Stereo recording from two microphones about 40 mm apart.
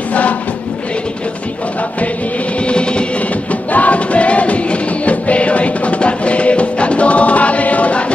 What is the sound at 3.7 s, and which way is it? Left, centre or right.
Music, left.